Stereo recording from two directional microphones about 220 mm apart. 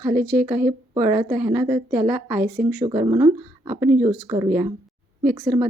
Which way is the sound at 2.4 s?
45° right (ahead or behind).